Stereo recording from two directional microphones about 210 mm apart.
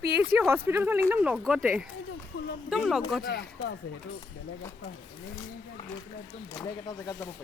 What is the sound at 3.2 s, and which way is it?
Speech, 50° left (ahead or behind).